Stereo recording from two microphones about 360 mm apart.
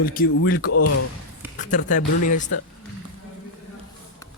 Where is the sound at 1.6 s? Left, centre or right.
Left.